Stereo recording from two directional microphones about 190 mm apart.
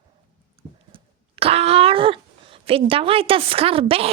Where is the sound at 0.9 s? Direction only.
30° right (ahead or behind).